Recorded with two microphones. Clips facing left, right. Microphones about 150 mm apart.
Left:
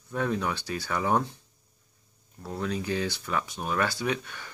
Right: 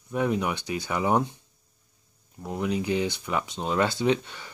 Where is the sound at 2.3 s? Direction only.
15° right (ahead or behind).